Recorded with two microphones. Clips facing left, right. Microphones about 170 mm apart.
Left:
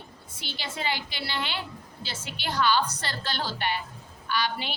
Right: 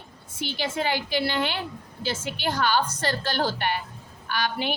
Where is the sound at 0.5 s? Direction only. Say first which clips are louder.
Right 5 dB; 50° right (ahead or behind).